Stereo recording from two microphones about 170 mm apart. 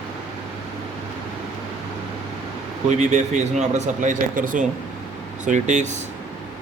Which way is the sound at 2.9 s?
45° right (ahead or behind).